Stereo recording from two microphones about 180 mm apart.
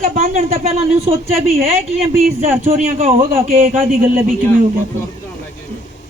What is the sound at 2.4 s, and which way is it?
A man's voice, 40° right (ahead or behind).